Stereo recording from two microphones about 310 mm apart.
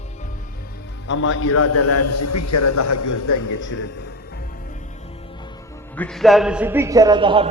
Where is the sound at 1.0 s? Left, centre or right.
Left.